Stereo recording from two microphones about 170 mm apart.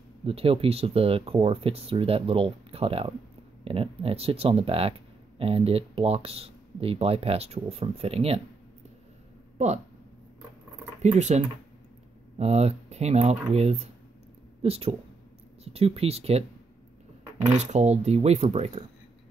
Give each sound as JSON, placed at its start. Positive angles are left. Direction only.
{"t": 0.2, "sound": "speech", "side_deg": -35}
{"t": 11.0, "sound": "speech", "side_deg": -40}
{"t": 17.6, "sound": "speech", "side_deg": -40}